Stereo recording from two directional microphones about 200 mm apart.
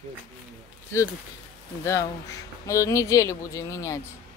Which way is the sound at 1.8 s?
15° left (ahead or behind).